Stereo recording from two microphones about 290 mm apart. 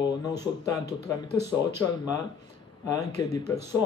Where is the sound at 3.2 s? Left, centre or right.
Centre.